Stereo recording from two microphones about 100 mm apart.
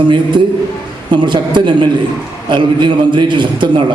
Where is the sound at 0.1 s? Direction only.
50° right (ahead or behind).